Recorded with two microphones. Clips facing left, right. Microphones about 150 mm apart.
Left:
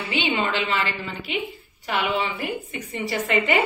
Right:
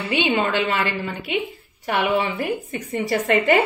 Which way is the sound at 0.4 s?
55° right (ahead or behind).